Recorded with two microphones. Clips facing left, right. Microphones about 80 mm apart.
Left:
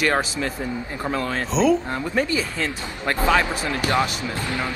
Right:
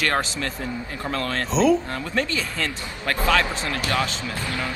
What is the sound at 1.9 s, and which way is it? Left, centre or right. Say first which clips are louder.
Speech: left 3 dB; centre.